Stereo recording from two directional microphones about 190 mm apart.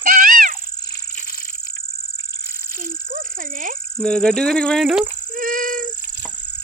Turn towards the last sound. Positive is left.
turn(degrees=-45)  # may be behind; listen again after turning